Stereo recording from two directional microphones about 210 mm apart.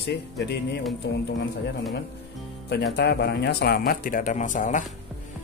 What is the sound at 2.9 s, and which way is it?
A man's voice, 55° left (ahead or behind).